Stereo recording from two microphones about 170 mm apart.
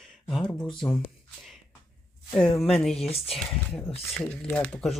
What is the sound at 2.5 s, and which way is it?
Speech, centre (ahead or behind).